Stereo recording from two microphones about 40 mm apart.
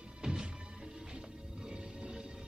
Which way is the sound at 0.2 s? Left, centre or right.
Centre.